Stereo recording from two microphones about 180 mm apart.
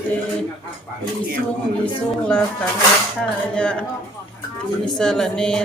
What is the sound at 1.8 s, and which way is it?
Speech, 5° left (ahead or behind).